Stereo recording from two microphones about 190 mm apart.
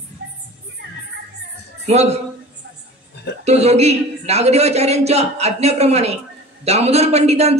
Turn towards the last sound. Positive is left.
turn(degrees=-35)  # may be behind; listen again after turning